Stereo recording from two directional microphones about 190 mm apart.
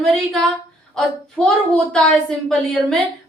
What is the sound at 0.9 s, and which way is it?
A woman's voice, 5° left (ahead or behind).